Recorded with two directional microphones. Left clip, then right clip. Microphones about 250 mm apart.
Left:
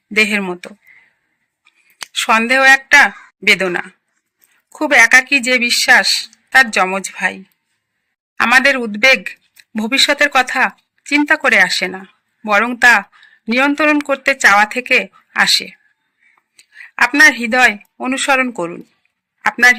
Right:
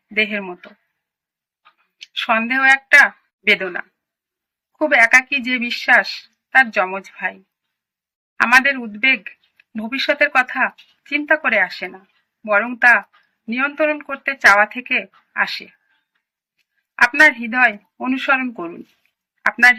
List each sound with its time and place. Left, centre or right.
0.1 s speech: left
2.1 s a woman's voice: left
4.9 s speech: left
8.4 s speech: left
16.9 s speech: left